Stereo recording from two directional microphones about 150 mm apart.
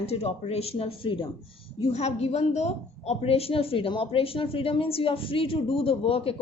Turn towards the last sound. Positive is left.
turn(degrees=40)  # may be behind; listen again after turning